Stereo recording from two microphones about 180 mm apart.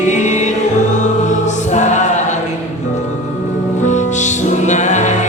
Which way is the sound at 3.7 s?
40° left (ahead or behind).